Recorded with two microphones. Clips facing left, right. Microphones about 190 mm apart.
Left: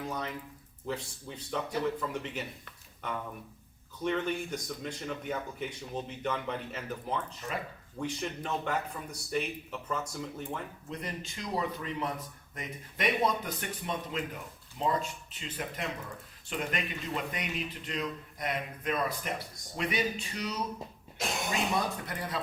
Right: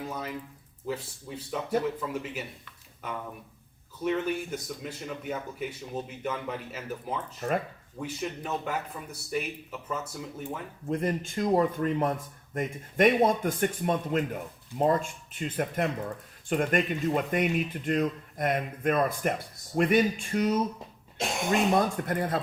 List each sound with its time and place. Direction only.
0.1 s speech: 5° right (ahead or behind)
4.0 s speech: 5° right (ahead or behind)
7.4 s speech: 65° right (ahead or behind)
7.9 s a man's voice: 5° right (ahead or behind)
10.8 s speech: 50° right (ahead or behind)